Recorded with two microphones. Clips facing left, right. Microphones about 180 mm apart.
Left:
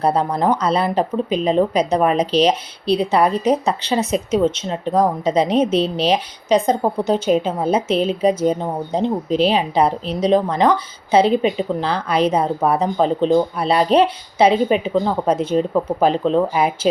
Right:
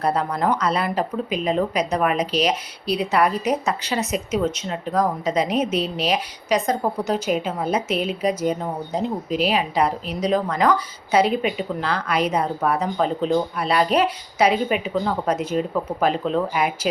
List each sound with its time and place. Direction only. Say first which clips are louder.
0.0 s a woman's voice: left 4 dB; 30° left (ahead or behind)